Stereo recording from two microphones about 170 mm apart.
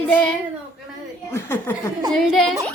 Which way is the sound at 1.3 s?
15° left (ahead or behind).